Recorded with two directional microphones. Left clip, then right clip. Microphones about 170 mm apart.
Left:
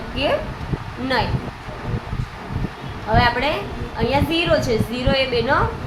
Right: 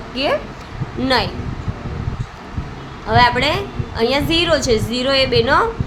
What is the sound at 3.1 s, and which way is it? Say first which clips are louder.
A woman's voice: right 4 dB; 45° right (ahead or behind).